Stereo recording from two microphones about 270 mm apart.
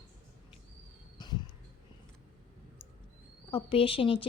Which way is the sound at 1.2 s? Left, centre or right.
Centre.